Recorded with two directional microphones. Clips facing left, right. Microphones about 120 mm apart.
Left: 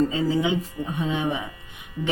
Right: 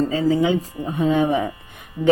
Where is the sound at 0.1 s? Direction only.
35° right (ahead or behind).